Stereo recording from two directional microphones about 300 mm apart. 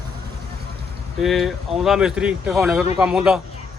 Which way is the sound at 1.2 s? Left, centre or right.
Centre.